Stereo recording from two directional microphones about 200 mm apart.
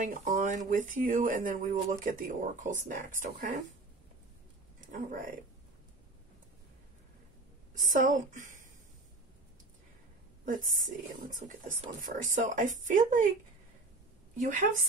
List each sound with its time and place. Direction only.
0.0 s speech: 40° right (ahead or behind)
4.7 s speech: 40° right (ahead or behind)
7.9 s speech: 40° right (ahead or behind)
10.4 s speech: 40° right (ahead or behind)
14.4 s speech: 40° right (ahead or behind)